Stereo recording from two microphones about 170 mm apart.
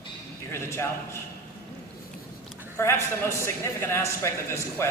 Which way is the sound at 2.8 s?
15° left (ahead or behind).